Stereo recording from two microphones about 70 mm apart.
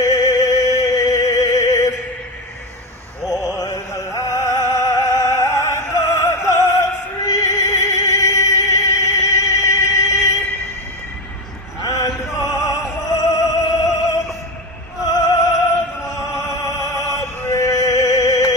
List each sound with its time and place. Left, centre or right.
0.0 s music: left
3.4 s music: left
3.9 s music: left
11.9 s male singing: left
12.4 s opera: left
16.4 s music: left